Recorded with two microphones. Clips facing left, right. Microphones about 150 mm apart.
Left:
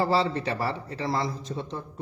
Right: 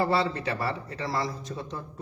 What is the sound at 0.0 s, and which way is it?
A man's voice, 30° left (ahead or behind).